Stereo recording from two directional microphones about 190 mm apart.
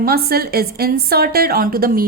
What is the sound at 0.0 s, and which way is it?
Speech, 55° right (ahead or behind).